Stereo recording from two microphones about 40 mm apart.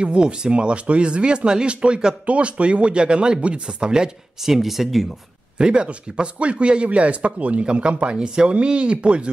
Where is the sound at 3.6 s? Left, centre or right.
Centre.